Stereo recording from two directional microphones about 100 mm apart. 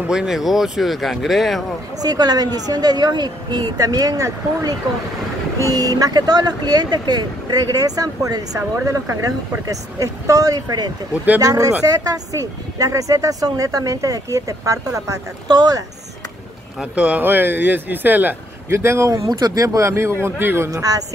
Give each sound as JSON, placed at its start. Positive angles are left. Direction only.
{"t": 0.0, "sound": "speech", "side_deg": -5}
{"t": 2.0, "sound": "speech", "side_deg": -40}
{"t": 16.9, "sound": "speech", "side_deg": -15}